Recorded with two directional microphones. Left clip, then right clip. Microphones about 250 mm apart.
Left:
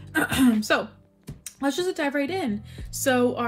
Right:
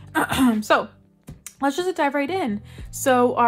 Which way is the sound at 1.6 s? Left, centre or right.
Centre.